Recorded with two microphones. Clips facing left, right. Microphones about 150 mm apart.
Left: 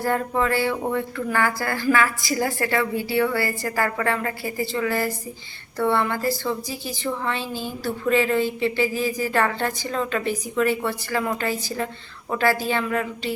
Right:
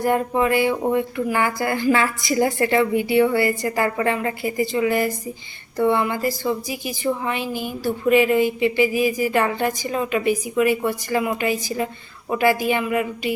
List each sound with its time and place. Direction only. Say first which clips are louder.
0.0 s a woman's voice: right 3 dB; 15° right (ahead or behind)